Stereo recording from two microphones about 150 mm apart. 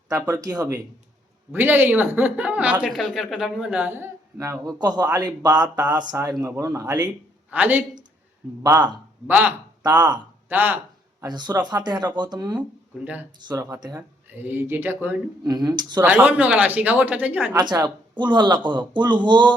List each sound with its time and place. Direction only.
0.1 s speech: 25° right (ahead or behind)
1.5 s a woman's voice: 15° right (ahead or behind)
7.5 s a woman's voice: 10° right (ahead or behind)
9.2 s a woman's voice: 15° right (ahead or behind)
10.0 s speech: 30° right (ahead or behind)
10.5 s a woman's voice: 15° right (ahead or behind)
11.2 s speech: 30° right (ahead or behind)
14.3 s a woman's voice: 15° right (ahead or behind)
15.4 s speech: 30° right (ahead or behind)
16.0 s a woman's voice: 10° right (ahead or behind)
17.7 s speech: 30° right (ahead or behind)